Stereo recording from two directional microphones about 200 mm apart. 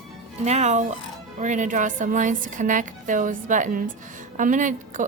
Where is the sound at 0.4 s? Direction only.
35° right (ahead or behind).